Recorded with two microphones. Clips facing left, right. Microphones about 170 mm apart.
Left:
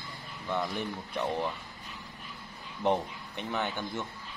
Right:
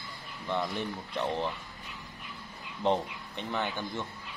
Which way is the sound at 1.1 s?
10° left (ahead or behind).